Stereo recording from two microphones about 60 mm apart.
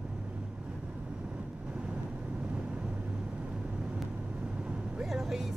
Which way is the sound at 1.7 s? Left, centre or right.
Centre.